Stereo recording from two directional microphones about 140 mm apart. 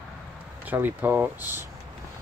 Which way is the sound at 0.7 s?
15° right (ahead or behind).